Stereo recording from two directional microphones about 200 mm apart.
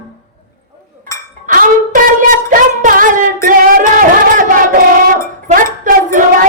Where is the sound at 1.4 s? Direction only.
40° right (ahead or behind).